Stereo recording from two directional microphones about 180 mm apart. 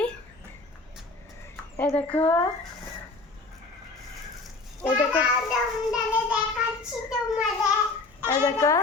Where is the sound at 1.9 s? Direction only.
15° right (ahead or behind).